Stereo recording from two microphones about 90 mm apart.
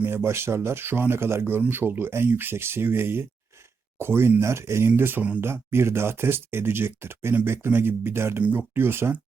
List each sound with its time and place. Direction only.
0.0 s speech: 25° right (ahead or behind)